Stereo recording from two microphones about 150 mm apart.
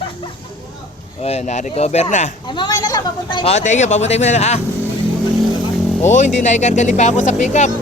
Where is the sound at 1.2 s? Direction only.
50° left (ahead or behind).